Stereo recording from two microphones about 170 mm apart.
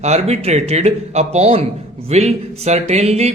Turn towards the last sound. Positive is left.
turn(degrees=-40)  # may be behind; listen again after turning